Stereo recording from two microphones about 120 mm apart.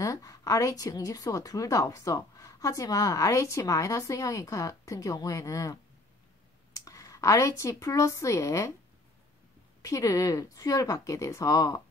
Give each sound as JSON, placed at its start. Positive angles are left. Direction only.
{"t": 0.0, "sound": "a woman's voice", "side_deg": 30}
{"t": 9.8, "sound": "a woman's voice", "side_deg": 30}